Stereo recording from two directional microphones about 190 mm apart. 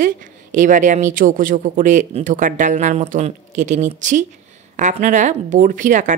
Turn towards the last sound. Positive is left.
turn(degrees=-40)  # may be behind; listen again after turning